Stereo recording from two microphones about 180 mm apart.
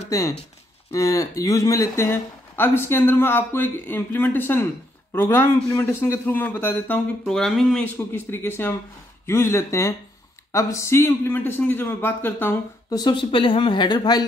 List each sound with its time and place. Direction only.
0.9 s speech: 20° left (ahead or behind)
13.0 s speech: 25° left (ahead or behind)